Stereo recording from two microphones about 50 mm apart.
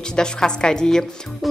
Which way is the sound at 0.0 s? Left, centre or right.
Centre.